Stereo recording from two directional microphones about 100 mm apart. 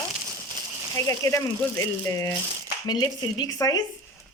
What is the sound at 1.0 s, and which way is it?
Speech, 30° left (ahead or behind).